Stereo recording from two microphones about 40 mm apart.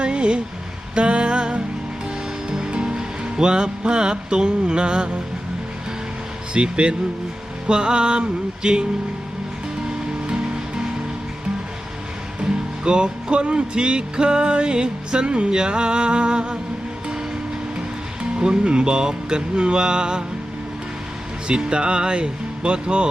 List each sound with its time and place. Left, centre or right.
0.0 s a sound: right
2.5 s music: centre
6.5 s music: right
10.2 s music: right
12.4 s music: right
17.7 s speech: right
21.4 s music: right